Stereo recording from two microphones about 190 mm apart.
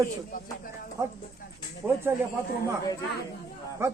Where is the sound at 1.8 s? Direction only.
10° right (ahead or behind).